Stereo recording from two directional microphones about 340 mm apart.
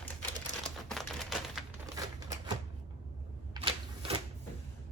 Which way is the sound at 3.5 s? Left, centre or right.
Centre.